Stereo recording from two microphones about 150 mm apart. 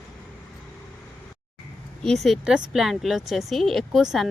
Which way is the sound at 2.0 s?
Centre (ahead or behind).